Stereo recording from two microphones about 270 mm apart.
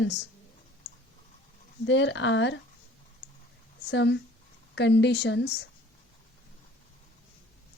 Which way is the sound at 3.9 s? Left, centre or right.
Left.